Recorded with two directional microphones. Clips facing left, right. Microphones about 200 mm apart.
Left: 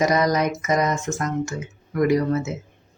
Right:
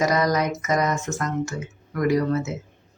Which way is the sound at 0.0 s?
20° left (ahead or behind).